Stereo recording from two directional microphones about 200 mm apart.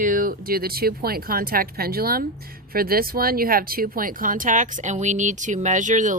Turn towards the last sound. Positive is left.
turn(degrees=-40)  # may be behind; listen again after turning